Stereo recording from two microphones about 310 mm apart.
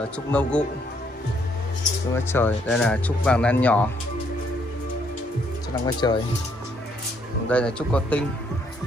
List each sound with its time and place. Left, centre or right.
0.3 s speech: centre
2.1 s speech: centre
5.9 s speech: centre
7.4 s speech: centre